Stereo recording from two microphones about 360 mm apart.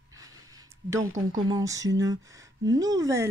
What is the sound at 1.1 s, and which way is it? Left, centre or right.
Speech, right.